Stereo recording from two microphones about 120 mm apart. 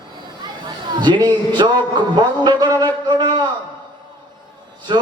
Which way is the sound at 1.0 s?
40° right (ahead or behind).